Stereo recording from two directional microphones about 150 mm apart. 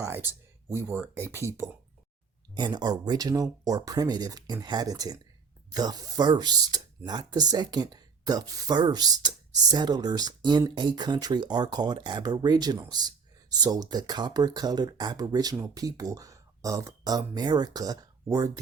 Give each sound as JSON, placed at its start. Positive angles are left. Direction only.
{"t": 0.0, "sound": "speech", "side_deg": -15}